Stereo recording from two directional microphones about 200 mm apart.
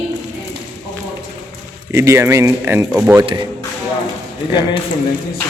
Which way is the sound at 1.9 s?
15° right (ahead or behind).